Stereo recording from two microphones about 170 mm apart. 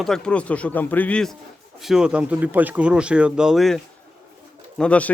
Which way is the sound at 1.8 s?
5° right (ahead or behind).